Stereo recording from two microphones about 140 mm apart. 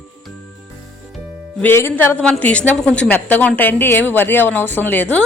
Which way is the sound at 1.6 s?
15° left (ahead or behind).